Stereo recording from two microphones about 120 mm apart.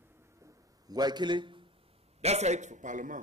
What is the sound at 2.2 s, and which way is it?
Speech, 65° right (ahead or behind).